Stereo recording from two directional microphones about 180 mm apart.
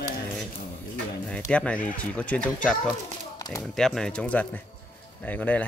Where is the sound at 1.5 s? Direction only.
5° left (ahead or behind).